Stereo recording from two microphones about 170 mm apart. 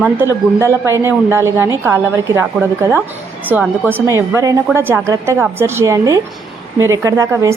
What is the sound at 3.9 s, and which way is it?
A woman's voice, 15° right (ahead or behind).